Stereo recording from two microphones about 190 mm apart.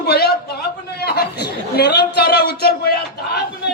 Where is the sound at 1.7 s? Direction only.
60° left (ahead or behind).